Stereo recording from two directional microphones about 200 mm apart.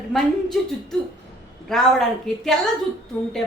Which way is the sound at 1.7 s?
Centre (ahead or behind).